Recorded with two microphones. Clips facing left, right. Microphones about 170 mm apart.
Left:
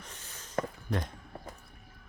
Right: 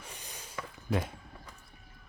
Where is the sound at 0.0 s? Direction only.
15° right (ahead or behind).